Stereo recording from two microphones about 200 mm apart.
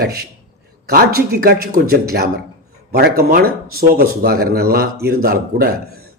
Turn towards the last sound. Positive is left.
turn(degrees=-50)  # may be behind; listen again after turning